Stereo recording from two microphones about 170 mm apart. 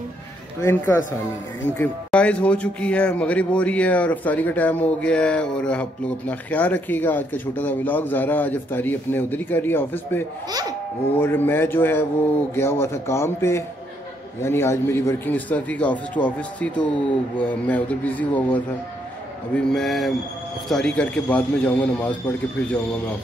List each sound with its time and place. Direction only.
0.6 s a man's voice: 15° left (ahead or behind)